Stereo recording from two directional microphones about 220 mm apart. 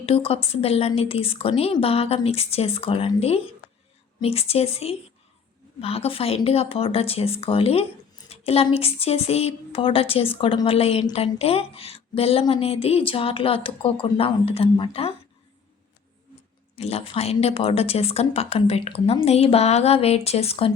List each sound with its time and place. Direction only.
0.0 s a woman's voice: 25° left (ahead or behind)
16.7 s a woman's voice: 25° left (ahead or behind)